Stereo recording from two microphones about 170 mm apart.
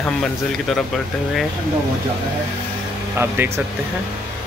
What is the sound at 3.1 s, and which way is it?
Speech, 10° right (ahead or behind).